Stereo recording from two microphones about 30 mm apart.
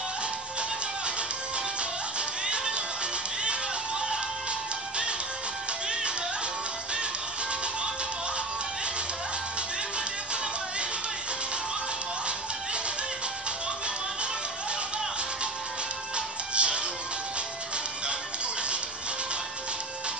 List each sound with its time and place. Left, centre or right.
2.1 s music: right
16.5 s music: right